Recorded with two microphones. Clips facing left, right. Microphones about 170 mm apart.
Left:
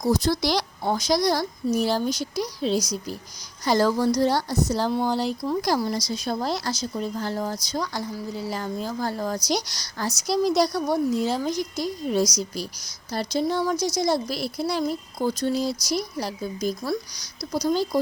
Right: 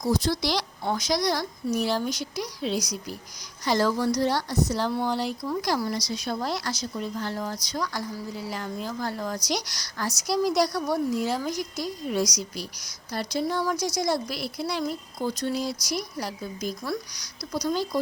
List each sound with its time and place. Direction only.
0.0 s speech: 40° left (ahead or behind); by 5.0 s 25° left (ahead or behind)
5.0 s speech: 35° left (ahead or behind)